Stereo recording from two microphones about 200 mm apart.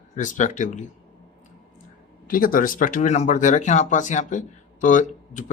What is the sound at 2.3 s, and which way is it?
Speech, 45° left (ahead or behind).